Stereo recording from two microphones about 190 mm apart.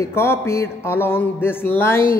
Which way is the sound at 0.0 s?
15° left (ahead or behind).